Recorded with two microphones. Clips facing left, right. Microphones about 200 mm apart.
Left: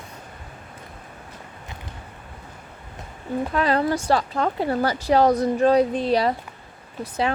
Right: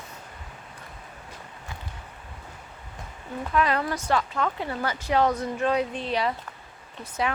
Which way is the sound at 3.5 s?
35° left (ahead or behind).